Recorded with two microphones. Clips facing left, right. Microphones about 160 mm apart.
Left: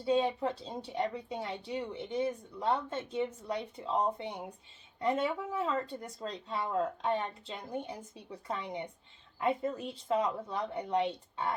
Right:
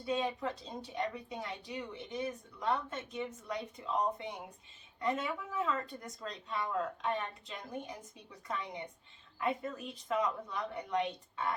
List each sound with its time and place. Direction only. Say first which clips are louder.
0.0 s speech: left 5 dB; 30° left (ahead or behind)